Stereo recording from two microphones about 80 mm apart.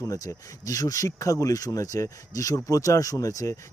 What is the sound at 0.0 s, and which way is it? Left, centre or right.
Speech, left.